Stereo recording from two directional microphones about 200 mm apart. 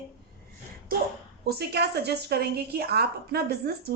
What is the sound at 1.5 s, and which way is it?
A woman's voice, 55° right (ahead or behind).